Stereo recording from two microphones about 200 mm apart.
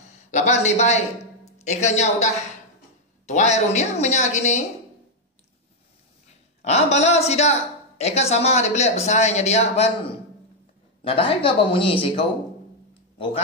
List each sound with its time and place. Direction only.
0.3 s a woman's voice: 35° left (ahead or behind)
6.6 s speech: 30° left (ahead or behind)
11.1 s speech: 25° left (ahead or behind)